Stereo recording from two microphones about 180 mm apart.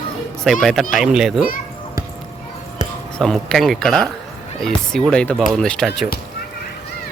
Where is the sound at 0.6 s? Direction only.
Centre (ahead or behind).